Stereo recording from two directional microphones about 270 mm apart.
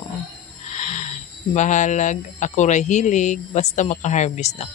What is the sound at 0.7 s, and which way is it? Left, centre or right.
Speech, left.